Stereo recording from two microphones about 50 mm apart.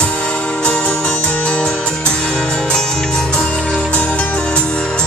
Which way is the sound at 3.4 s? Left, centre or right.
Left.